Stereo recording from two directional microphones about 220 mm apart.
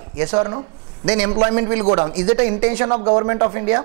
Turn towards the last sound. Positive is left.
turn(degrees=-20)  # may be behind; listen again after turning